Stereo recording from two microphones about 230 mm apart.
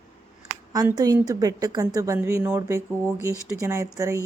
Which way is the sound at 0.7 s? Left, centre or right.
Centre.